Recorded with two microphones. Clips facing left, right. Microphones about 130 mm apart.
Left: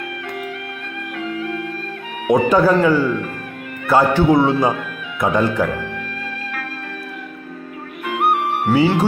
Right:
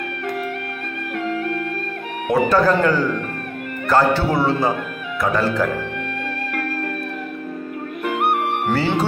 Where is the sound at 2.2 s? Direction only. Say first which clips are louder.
Left 2 dB; 15° left (ahead or behind).